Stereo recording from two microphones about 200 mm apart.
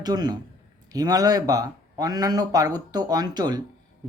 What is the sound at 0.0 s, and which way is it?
Speech, 20° right (ahead or behind).